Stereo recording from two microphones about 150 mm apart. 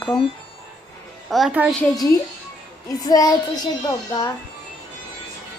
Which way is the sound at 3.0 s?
25° left (ahead or behind).